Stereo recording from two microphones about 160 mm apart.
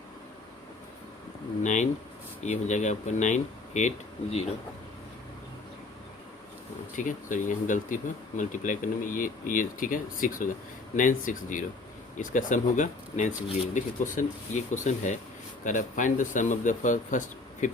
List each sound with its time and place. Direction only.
1.6 s speech: 50° left (ahead or behind)
6.9 s speech: 55° left (ahead or behind)